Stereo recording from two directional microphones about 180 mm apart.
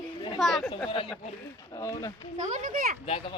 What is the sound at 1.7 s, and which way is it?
Speech, 15° left (ahead or behind).